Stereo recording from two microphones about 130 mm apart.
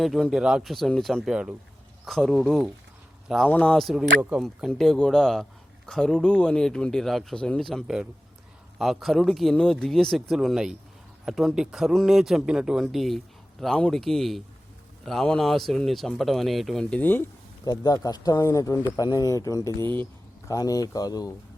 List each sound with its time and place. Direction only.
0.0 s a man's voice: centre (ahead or behind)
3.5 s a man's voice: 10° left (ahead or behind)
17.7 s speech: 30° left (ahead or behind)
20.5 s speech: 30° left (ahead or behind)